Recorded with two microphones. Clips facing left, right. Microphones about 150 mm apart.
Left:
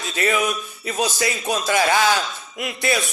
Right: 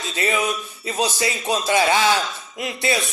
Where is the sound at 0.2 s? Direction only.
25° right (ahead or behind).